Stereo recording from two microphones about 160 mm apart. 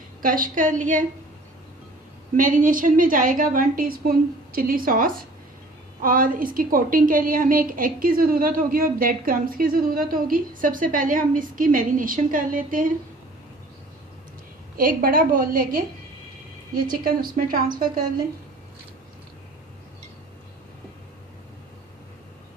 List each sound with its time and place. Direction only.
0.2 s a woman's voice: 60° right (ahead or behind)
2.3 s a woman's voice: 55° right (ahead or behind)
14.8 s a woman's voice: 60° right (ahead or behind)
17.3 s a woman's voice: 65° right (ahead or behind)